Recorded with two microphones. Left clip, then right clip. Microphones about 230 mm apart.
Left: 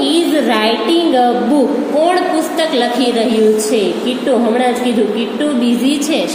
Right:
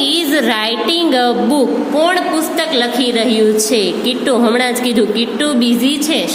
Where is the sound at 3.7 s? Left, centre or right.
Right.